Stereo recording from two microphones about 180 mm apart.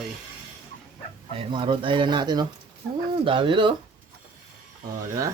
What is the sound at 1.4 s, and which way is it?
Speech, 25° right (ahead or behind).